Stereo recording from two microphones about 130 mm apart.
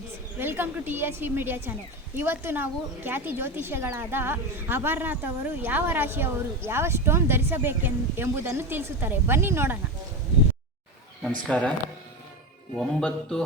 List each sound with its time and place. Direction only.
0.3 s a woman's voice: 15° right (ahead or behind)
11.4 s speech: 10° left (ahead or behind)
12.7 s music: 5° left (ahead or behind)